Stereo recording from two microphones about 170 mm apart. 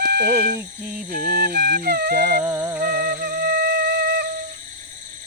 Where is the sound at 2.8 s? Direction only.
60° right (ahead or behind).